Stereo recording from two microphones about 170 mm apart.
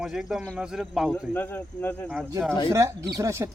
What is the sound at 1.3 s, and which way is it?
Speech, 10° left (ahead or behind).